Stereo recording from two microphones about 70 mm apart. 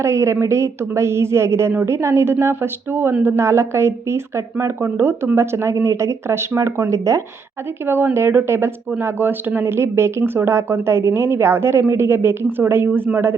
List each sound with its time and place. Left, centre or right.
0.0 s speech: right
7.9 s speech: right